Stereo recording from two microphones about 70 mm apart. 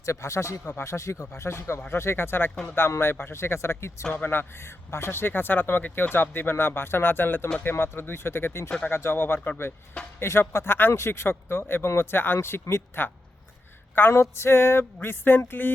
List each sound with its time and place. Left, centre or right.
0.0 s speech: left
0.6 s speech: left
0.9 s speech: left